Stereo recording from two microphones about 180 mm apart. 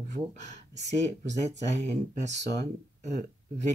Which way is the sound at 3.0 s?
40° right (ahead or behind).